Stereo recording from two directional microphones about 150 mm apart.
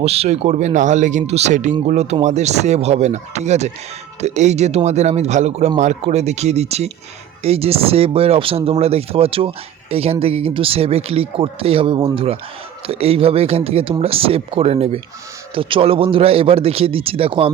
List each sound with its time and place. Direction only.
0.0 s speech: 45° right (ahead or behind)